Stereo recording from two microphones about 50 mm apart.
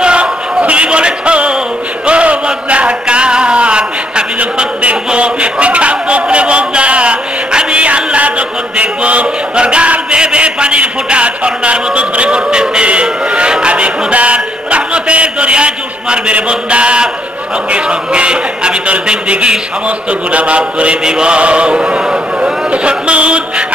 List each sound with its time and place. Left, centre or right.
0.0 s music: right
2.0 s a sound: right
4.4 s speech: right
17.6 s chant: right